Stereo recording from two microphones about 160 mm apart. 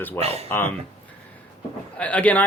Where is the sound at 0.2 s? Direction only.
40° right (ahead or behind).